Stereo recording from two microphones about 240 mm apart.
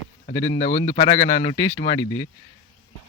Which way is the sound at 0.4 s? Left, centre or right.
Left.